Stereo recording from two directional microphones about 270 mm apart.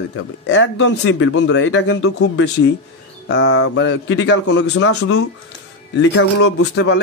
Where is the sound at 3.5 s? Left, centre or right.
Left.